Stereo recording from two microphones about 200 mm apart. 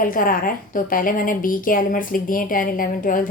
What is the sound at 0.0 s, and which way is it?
A woman's voice, 45° left (ahead or behind).